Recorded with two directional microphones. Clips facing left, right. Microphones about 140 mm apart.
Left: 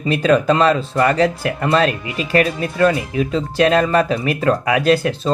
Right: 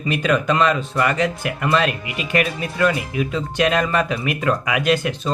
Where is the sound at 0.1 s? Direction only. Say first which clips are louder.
Left 5 dB; 35° left (ahead or behind).